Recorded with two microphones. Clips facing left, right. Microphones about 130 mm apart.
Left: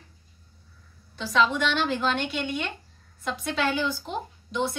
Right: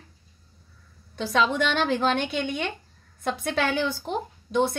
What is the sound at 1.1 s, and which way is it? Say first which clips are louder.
Speech: even; 55° right (ahead or behind).